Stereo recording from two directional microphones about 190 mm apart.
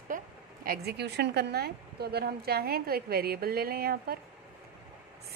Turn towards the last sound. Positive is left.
turn(degrees=-55)  # may be behind; listen again after turning